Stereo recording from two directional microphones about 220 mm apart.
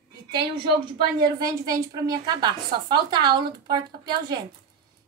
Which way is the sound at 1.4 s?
15° right (ahead or behind).